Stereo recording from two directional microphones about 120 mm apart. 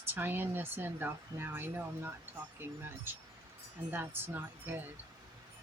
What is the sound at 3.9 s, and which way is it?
Speech, 20° right (ahead or behind).